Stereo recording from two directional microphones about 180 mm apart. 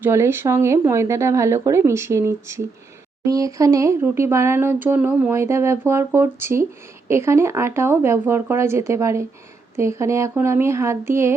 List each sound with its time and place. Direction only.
0.0 s speech: 15° right (ahead or behind)